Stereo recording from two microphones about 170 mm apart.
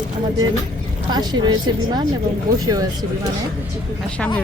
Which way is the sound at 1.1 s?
25° right (ahead or behind).